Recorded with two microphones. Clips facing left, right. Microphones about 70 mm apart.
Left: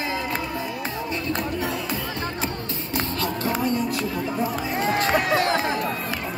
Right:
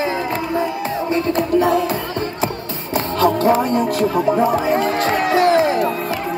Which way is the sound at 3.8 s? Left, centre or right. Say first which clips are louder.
Right 9 dB; right.